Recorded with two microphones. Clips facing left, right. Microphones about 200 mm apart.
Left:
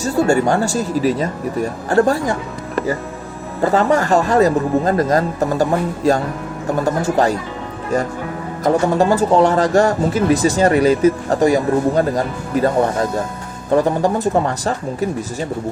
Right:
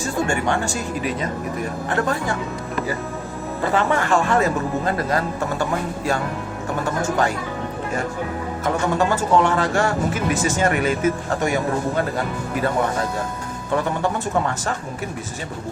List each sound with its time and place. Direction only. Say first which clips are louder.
0.0 s speech: left 7 dB; 35° left (ahead or behind)
3.6 s speech: left 6 dB; 40° left (ahead or behind)
8.6 s speech: left 6 dB; 35° left (ahead or behind)